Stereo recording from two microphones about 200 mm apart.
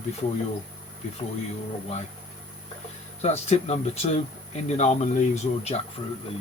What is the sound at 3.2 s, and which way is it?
Speech, 30° left (ahead or behind).